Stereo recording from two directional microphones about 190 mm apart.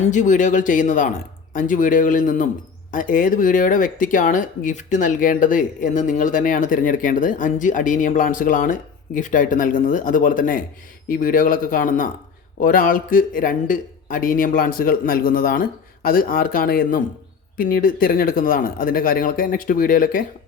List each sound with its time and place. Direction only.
0.0 s speech: 40° left (ahead or behind)